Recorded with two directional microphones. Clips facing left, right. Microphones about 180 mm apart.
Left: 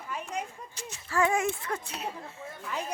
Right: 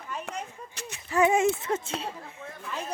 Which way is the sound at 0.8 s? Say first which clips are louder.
Right 2 dB; 65° right (ahead or behind).